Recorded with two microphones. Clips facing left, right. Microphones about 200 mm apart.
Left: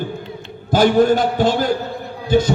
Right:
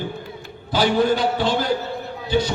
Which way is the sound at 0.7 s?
45° left (ahead or behind).